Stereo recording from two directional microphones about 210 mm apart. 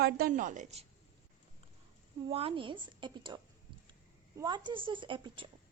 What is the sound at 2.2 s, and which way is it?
A woman's voice, 25° right (ahead or behind).